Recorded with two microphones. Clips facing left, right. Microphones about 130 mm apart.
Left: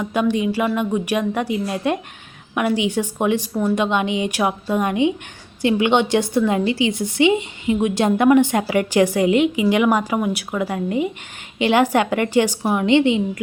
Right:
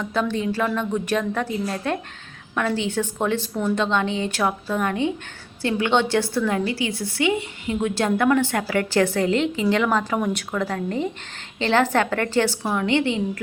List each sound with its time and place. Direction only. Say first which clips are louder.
0.0 s a woman's voice: left 4 dB; 15° left (ahead or behind)